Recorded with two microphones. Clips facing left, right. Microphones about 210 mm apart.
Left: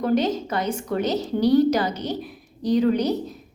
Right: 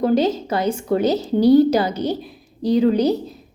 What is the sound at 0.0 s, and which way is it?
A woman's voice, 30° right (ahead or behind).